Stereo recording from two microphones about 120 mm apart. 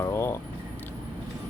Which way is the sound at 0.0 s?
20° left (ahead or behind).